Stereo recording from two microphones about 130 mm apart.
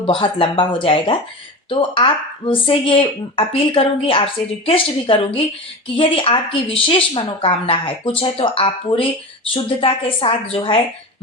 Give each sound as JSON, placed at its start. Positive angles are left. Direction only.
{"t": 0.0, "sound": "a woman's voice", "side_deg": 45}